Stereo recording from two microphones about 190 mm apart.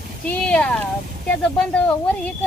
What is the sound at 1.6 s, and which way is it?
Speech, 5° left (ahead or behind).